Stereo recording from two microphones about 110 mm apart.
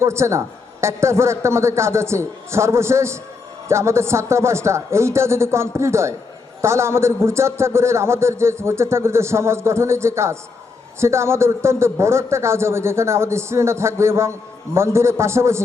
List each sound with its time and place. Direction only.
0.0 s a man's voice: 25° right (ahead or behind)